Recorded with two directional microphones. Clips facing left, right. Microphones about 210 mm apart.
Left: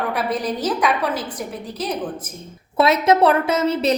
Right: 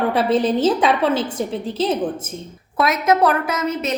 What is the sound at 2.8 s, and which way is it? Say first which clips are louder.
A woman's voice: left 2 dB; 30° left (ahead or behind).